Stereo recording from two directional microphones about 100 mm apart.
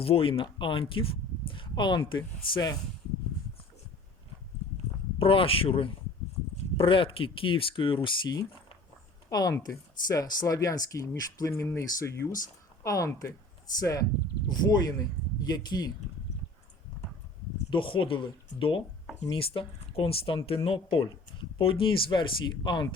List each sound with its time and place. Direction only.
0.0 s speech: 65° left (ahead or behind); by 2.7 s 45° left (ahead or behind)
5.2 s speech: 65° left (ahead or behind)
8.0 s speech: 45° left (ahead or behind)
17.7 s speech: 60° left (ahead or behind)